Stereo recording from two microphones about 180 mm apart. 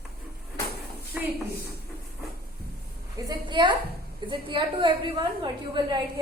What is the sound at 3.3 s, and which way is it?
A woman's voice, 25° right (ahead or behind).